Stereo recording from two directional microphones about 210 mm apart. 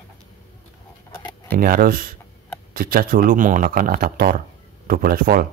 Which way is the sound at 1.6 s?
45° right (ahead or behind).